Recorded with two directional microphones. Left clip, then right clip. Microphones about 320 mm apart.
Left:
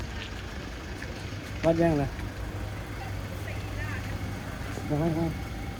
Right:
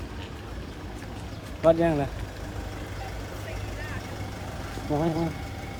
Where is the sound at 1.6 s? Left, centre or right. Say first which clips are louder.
Right 3 dB; centre.